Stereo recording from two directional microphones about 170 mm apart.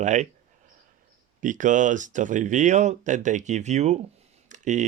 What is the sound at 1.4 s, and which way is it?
Speech, 50° right (ahead or behind).